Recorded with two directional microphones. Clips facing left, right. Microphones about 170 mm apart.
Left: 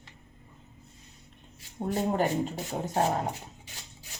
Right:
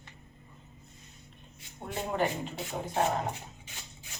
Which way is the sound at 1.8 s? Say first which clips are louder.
Left 4 dB; 40° left (ahead or behind).